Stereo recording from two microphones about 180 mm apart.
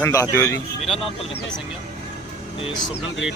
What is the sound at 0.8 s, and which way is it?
Speech, centre (ahead or behind).